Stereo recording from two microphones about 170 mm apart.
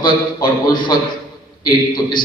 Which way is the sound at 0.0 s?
25° left (ahead or behind).